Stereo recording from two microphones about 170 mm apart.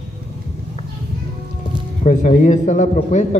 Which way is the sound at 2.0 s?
45° left (ahead or behind).